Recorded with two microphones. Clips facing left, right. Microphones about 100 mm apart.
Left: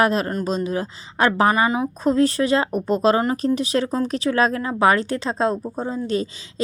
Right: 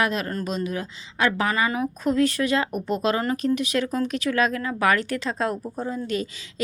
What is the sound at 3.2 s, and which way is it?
Speech, 25° left (ahead or behind).